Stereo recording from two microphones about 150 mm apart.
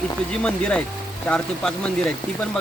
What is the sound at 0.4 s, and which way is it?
Speech, 5° left (ahead or behind).